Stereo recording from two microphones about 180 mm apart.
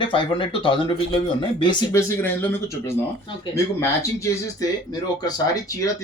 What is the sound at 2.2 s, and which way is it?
Speech, 10° left (ahead or behind).